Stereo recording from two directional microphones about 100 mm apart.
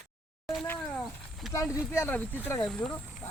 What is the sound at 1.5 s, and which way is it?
Speech, 35° left (ahead or behind).